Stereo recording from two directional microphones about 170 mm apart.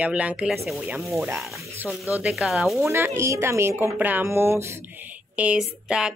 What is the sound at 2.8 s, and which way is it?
A woman's voice, 15° right (ahead or behind).